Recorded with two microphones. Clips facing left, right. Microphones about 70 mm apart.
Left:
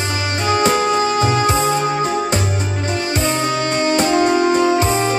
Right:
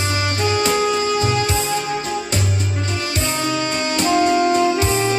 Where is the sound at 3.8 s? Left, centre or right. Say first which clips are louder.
Left 2 dB; left.